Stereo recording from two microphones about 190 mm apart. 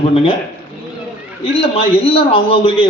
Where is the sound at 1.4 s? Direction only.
30° left (ahead or behind).